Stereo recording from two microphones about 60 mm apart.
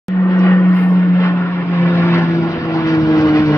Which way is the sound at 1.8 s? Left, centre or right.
Left.